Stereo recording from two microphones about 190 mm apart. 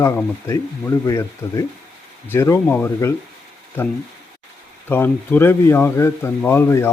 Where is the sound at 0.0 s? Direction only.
15° left (ahead or behind).